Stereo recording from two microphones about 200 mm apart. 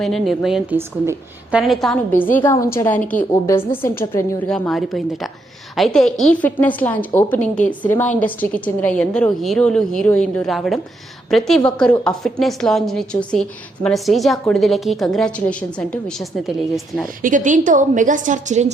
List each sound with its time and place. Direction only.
0.0 s a woman's voice: centre (ahead or behind)
4.5 s a woman's voice: centre (ahead or behind)
17.2 s a woman's voice: 40° right (ahead or behind)